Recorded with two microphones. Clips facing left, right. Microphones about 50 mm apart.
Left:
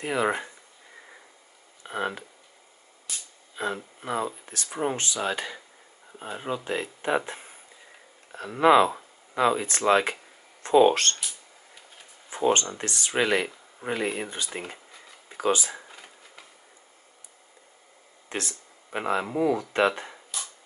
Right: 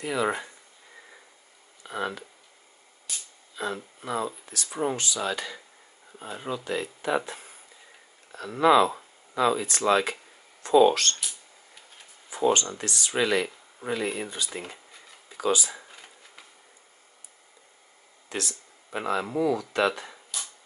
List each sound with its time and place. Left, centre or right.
0.0 s speech: left
1.8 s speech: left
3.5 s speech: left
4.6 s speech: centre
4.9 s speech: left
12.3 s a sound: left
12.7 s speech: left
14.3 s speech: left
15.9 s a sound: centre
18.3 s speech: left